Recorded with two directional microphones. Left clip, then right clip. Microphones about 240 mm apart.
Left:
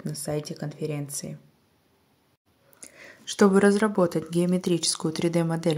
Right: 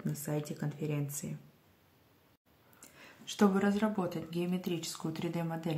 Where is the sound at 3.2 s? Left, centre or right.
Left.